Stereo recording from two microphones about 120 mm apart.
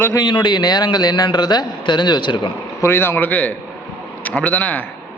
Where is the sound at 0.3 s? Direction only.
40° left (ahead or behind).